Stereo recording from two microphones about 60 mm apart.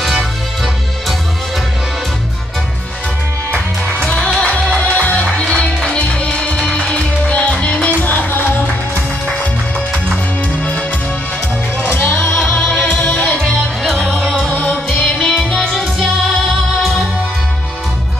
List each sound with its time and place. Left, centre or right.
4.7 s music: left
11.8 s music: left
14.9 s music: centre